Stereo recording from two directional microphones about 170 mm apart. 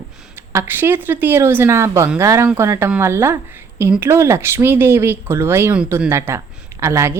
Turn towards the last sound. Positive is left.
turn(degrees=-15)  # may be behind; listen again after turning